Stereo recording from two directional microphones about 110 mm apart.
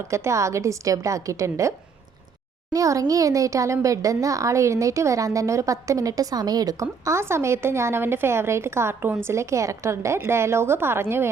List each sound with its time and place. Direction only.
0.1 s a child's voice: 25° right (ahead or behind)
2.7 s a child's voice: 30° right (ahead or behind)